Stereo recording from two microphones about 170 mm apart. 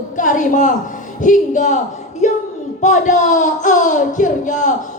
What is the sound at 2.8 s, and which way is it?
Speech, 45° left (ahead or behind).